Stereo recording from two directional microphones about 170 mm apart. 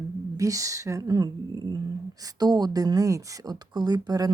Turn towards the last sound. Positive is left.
turn(degrees=-25)  # may be behind; listen again after turning